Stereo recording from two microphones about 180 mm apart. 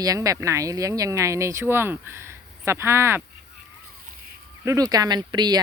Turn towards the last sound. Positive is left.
turn(degrees=-25)  # may be behind; listen again after turning